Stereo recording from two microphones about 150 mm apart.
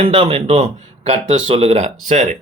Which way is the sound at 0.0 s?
40° right (ahead or behind).